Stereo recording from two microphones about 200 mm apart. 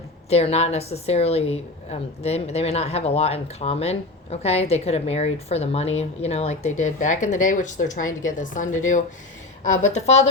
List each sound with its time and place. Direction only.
0.3 s a woman's voice: 30° left (ahead or behind)